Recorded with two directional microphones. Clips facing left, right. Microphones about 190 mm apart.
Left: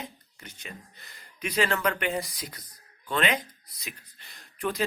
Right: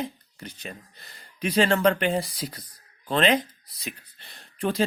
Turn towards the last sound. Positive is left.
turn(degrees=-30)  # may be behind; listen again after turning